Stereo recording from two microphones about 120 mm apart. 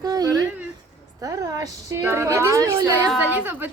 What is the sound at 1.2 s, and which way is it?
A woman's voice, 30° right (ahead or behind).